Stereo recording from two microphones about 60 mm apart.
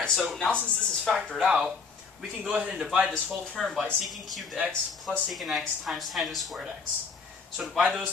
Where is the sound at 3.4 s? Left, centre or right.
Centre.